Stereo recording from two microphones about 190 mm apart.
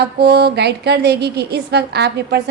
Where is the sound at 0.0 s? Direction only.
60° right (ahead or behind).